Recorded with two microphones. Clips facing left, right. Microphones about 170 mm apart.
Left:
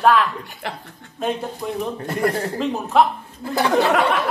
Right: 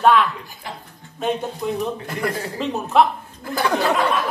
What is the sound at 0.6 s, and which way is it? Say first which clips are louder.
Speech: left 4 dB; 70° left (ahead or behind).